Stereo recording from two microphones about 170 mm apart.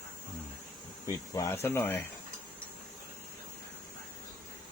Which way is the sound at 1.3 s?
15° left (ahead or behind).